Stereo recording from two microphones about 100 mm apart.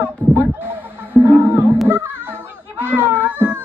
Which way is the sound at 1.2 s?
20° right (ahead or behind).